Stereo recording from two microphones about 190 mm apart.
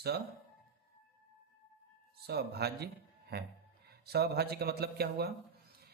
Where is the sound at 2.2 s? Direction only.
60° right (ahead or behind).